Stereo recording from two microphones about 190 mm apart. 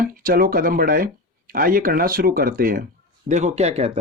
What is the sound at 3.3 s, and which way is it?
Speech, 40° right (ahead or behind).